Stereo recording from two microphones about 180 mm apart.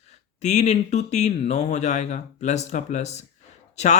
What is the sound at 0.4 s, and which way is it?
Speech, 40° left (ahead or behind).